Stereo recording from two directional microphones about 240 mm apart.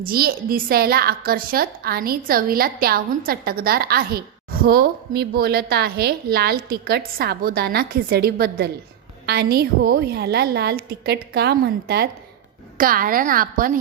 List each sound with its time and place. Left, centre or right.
0.0 s a woman's voice: right